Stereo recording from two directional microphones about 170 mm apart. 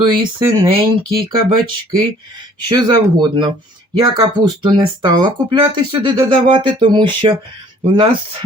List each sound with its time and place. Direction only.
0.0 s speech: 30° right (ahead or behind)
2.6 s speech: 25° right (ahead or behind)